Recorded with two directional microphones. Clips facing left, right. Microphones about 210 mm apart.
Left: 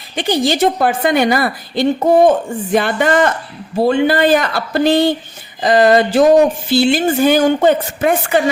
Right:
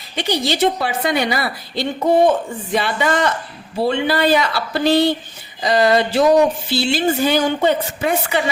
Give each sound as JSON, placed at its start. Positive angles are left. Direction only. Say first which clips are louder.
{"t": 0.2, "sound": "speech", "louder": "left 4 dB", "side_deg": 50}